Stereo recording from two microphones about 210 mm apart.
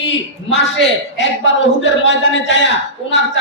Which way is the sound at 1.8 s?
60° left (ahead or behind).